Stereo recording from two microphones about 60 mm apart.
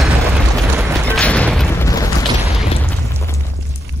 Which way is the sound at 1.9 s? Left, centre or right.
Left.